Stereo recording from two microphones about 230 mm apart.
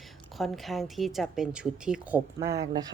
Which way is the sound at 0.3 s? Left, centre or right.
Centre.